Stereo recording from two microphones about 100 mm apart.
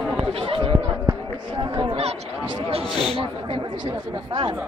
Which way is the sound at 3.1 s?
65° right (ahead or behind).